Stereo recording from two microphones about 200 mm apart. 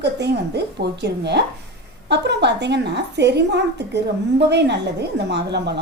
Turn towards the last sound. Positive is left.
turn(degrees=-55)  # may be behind; listen again after turning